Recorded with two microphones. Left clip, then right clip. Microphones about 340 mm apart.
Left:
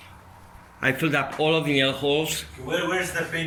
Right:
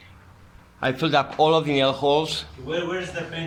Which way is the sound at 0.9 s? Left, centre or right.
Centre.